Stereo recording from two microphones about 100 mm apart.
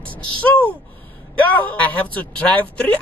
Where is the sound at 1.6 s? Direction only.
15° left (ahead or behind).